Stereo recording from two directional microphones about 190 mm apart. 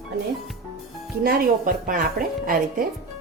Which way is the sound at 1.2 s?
50° right (ahead or behind).